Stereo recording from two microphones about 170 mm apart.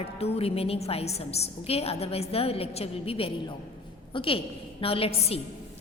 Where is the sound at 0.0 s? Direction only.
35° left (ahead or behind).